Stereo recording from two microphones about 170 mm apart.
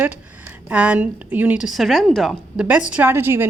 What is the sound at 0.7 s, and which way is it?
A woman's voice, 10° right (ahead or behind).